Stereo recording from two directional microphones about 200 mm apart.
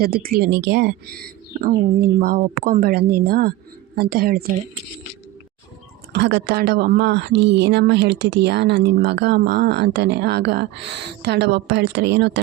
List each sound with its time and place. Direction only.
0.0 s speech: 50° right (ahead or behind)
6.1 s speech: 60° right (ahead or behind)